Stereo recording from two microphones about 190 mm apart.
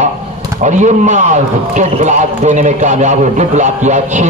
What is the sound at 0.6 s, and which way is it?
A man's voice, 40° right (ahead or behind).